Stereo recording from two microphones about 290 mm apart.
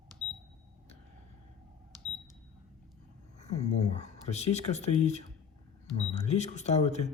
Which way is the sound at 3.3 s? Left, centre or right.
Left.